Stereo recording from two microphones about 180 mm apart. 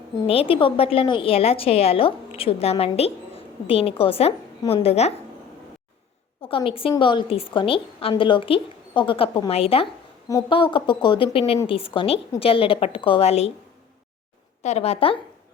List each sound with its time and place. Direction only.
0.3 s a woman's voice: 30° left (ahead or behind)
6.4 s a woman's voice: 30° left (ahead or behind)
14.6 s a woman's voice: 35° left (ahead or behind)